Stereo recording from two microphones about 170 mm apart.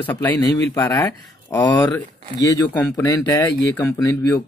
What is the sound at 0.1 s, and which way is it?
Speech, 10° left (ahead or behind).